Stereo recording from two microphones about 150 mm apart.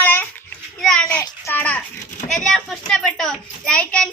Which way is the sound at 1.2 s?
20° left (ahead or behind).